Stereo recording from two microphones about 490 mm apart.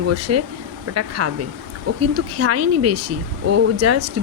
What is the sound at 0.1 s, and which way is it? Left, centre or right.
Speech, right.